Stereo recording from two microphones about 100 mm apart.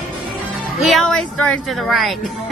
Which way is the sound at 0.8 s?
5° left (ahead or behind).